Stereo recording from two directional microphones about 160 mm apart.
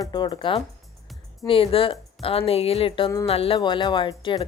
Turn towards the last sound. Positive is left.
turn(degrees=30)  # may be behind; listen again after turning